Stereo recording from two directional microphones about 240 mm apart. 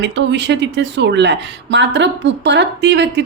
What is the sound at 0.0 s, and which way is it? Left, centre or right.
Speech, right.